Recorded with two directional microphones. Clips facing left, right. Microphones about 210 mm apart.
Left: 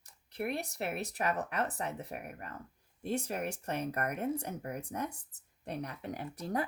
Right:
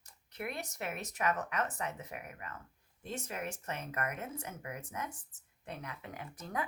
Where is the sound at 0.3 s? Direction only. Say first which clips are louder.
Left 5 dB; 35° left (ahead or behind).